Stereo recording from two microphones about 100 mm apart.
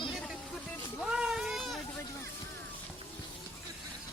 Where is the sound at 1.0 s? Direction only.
5° right (ahead or behind).